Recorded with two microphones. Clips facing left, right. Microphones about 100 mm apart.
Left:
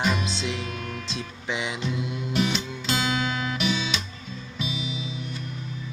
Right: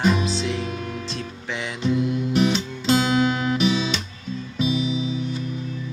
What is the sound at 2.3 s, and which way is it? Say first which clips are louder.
Music: right 3 dB; 30° right (ahead or behind).